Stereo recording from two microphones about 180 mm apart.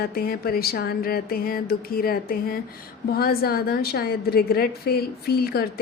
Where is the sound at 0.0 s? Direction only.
55° left (ahead or behind).